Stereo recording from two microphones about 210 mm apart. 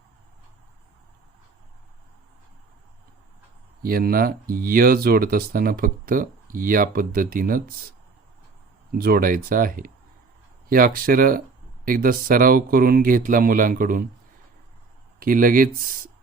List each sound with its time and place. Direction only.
3.8 s speech: 45° right (ahead or behind)
9.0 s speech: 45° right (ahead or behind)
15.2 s speech: 40° right (ahead or behind)